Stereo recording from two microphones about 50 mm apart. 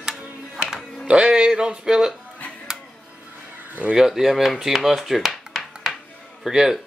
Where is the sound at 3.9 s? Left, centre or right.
Centre.